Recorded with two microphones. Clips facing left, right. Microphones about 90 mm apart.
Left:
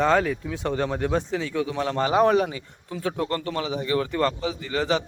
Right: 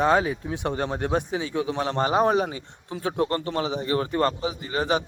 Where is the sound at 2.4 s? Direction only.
35° right (ahead or behind).